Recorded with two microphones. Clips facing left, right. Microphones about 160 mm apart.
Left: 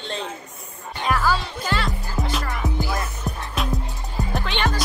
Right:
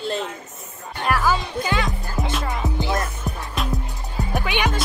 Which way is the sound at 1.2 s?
15° right (ahead or behind).